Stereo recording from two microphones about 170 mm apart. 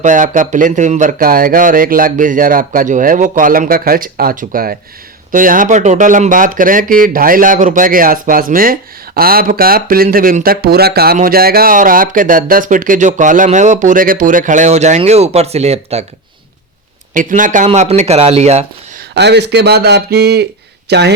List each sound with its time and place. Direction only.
0.0 s speech: 50° right (ahead or behind)
17.2 s speech: 50° right (ahead or behind)
19.1 s a man's voice: 85° right